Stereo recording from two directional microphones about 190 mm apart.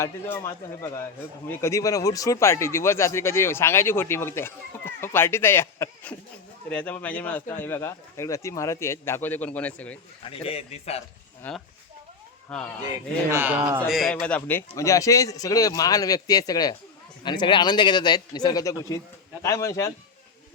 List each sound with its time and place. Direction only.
0.0 s a man's voice: 15° left (ahead or behind)
10.2 s speech: 30° left (ahead or behind)
11.4 s a man's voice: 10° left (ahead or behind)
13.3 s a man's voice: 10° right (ahead or behind); by 19.9 s 15° left (ahead or behind)